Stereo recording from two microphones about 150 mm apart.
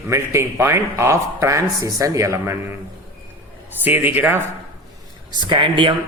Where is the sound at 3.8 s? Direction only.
10° right (ahead or behind).